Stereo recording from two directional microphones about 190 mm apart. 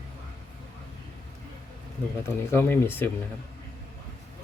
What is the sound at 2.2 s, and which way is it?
Speech, 10° left (ahead or behind).